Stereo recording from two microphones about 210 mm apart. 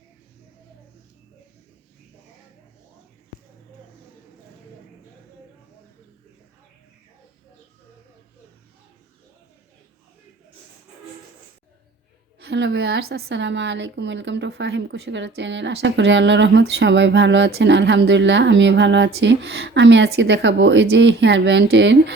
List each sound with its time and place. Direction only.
12.4 s a woman's voice: 55° right (ahead or behind)